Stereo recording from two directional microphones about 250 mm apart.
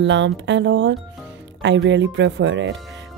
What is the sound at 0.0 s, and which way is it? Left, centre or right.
Speech, right.